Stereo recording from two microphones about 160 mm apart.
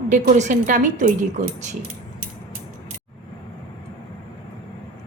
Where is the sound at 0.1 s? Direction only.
50° right (ahead or behind).